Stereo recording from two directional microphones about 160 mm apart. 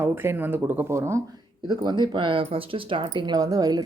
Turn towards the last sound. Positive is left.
turn(degrees=-25)  # may be behind; listen again after turning